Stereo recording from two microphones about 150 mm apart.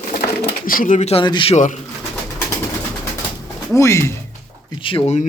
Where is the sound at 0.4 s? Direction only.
70° left (ahead or behind); by 1.2 s 50° left (ahead or behind).